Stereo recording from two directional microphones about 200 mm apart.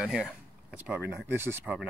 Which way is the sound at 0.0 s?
Centre (ahead or behind).